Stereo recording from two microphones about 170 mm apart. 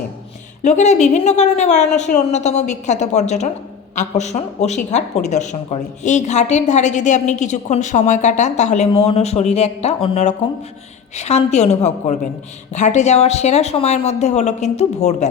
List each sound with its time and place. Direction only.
0.6 s a woman's voice: 45° left (ahead or behind)